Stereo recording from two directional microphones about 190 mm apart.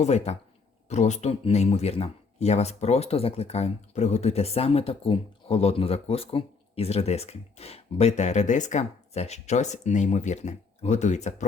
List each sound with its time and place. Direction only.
0.0 s speech: 35° left (ahead or behind)